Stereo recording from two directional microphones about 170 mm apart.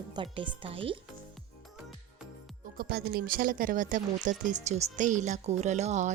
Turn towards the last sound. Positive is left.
turn(degrees=-45)  # may be behind; listen again after turning